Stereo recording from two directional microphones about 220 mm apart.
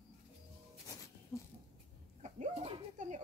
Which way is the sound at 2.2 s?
30° right (ahead or behind).